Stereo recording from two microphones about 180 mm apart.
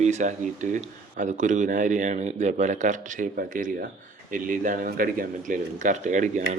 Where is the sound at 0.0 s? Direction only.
40° right (ahead or behind).